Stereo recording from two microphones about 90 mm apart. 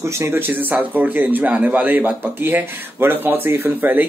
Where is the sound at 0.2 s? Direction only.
25° right (ahead or behind).